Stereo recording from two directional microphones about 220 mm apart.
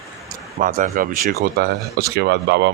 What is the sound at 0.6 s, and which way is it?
Speech, 40° right (ahead or behind).